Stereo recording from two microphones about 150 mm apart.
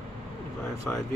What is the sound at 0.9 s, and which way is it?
Speech, 15° left (ahead or behind).